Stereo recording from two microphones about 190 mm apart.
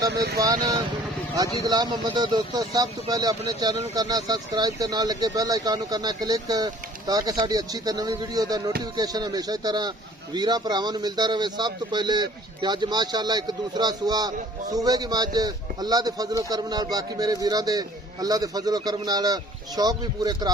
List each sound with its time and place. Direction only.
0.1 s speech: 60° right (ahead or behind)
0.3 s a man's voice: 20° right (ahead or behind)